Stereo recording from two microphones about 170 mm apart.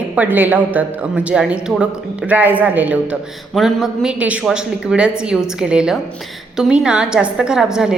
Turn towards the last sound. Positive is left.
turn(degrees=-5)  # may be behind; listen again after turning